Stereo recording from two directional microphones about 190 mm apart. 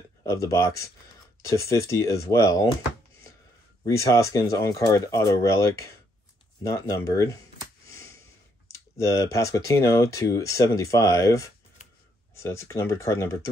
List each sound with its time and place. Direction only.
0.2 s speech: 15° left (ahead or behind)
3.8 s speech: 15° left (ahead or behind)
7.8 s a sound: 15° left (ahead or behind)
8.7 s speech: 15° left (ahead or behind)